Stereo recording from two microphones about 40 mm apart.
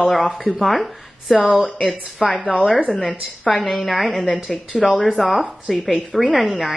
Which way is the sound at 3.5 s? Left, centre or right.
Centre.